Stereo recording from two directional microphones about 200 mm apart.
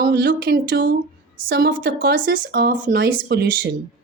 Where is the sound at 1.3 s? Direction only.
50° right (ahead or behind).